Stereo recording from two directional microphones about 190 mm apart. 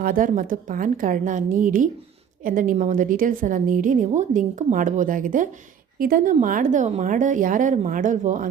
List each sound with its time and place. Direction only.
0.0 s a woman's voice: 45° right (ahead or behind)